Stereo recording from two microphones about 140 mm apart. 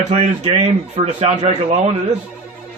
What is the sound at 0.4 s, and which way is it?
A man's voice, 55° right (ahead or behind).